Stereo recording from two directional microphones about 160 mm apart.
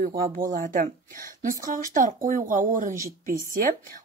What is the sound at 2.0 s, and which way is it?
A woman's voice, 55° right (ahead or behind).